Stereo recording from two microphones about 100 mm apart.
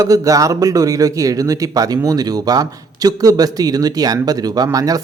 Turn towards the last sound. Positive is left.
turn(degrees=-35)  # may be behind; listen again after turning